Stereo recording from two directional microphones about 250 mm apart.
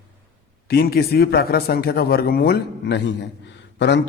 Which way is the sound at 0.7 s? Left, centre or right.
Left.